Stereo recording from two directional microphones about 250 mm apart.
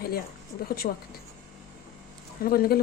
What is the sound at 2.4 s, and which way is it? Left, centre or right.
Speech, left.